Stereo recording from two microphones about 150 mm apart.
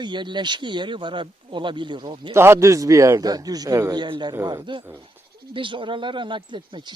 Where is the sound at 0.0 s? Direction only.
30° right (ahead or behind).